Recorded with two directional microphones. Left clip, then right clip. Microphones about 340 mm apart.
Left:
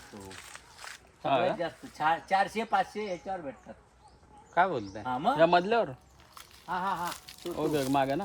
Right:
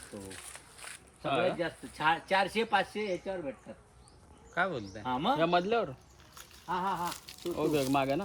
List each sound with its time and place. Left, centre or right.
1.2 s a man's voice: left
1.8 s speech: centre
4.5 s a man's voice: left
5.0 s speech: centre
5.4 s a man's voice: left
6.3 s speech: centre